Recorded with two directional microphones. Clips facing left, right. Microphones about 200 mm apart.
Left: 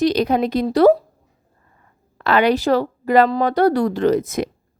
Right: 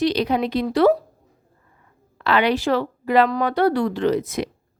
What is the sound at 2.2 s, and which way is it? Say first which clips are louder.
A woman's voice: left 3 dB; 45° left (ahead or behind).